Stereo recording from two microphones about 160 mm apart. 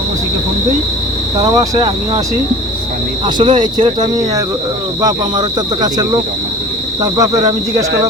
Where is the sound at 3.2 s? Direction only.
30° right (ahead or behind).